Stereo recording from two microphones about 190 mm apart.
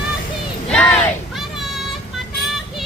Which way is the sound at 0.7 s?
5° left (ahead or behind).